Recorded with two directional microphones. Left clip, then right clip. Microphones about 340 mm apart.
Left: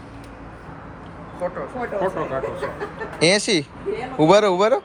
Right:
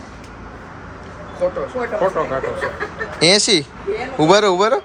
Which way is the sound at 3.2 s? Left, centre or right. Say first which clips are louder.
Right 4 dB; centre.